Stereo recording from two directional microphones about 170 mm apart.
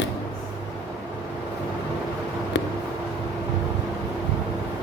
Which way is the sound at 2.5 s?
90° left.